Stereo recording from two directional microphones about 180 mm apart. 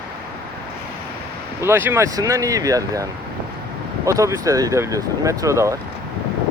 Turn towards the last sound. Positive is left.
turn(degrees=-15)  # may be behind; listen again after turning